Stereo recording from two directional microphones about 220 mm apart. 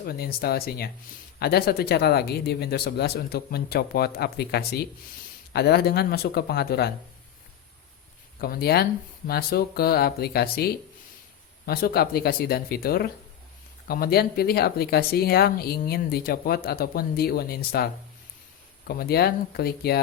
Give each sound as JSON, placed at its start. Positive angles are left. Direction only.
{"t": 0.0, "sound": "speech", "side_deg": 45}
{"t": 8.4, "sound": "speech", "side_deg": 45}
{"t": 18.9, "sound": "speech", "side_deg": 45}